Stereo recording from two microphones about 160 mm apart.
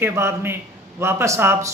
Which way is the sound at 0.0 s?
15° right (ahead or behind).